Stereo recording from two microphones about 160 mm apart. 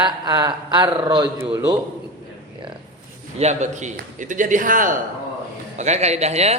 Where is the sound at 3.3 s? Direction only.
45° right (ahead or behind).